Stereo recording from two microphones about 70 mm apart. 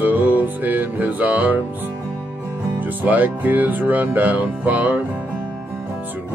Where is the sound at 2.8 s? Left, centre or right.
Right.